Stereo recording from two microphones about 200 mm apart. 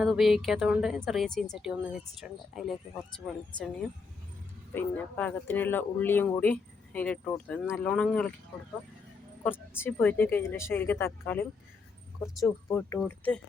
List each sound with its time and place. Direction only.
0.0 s a woman's voice: centre (ahead or behind)
4.7 s speech: 10° left (ahead or behind)
9.4 s speech: 10° left (ahead or behind)